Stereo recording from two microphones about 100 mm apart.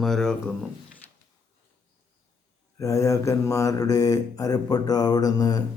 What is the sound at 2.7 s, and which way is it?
Speech, 35° left (ahead or behind).